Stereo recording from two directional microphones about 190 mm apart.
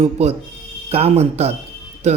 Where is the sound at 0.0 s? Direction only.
35° right (ahead or behind).